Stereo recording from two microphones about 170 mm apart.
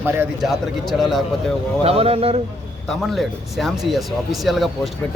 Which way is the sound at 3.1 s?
Centre (ahead or behind).